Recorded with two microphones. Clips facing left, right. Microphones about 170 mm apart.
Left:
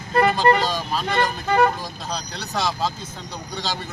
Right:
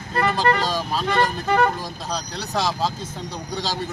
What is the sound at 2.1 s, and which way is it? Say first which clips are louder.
Speech: right 2 dB; 35° right (ahead or behind).